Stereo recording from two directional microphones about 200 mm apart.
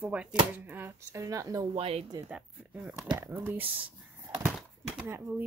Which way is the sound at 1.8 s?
30° right (ahead or behind).